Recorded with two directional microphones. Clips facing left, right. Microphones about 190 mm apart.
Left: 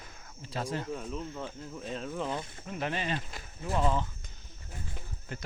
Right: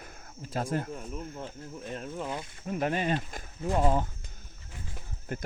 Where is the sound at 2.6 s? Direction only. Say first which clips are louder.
Right 6 dB; 45° right (ahead or behind).